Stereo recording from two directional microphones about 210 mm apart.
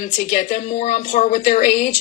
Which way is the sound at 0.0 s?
35° left (ahead or behind).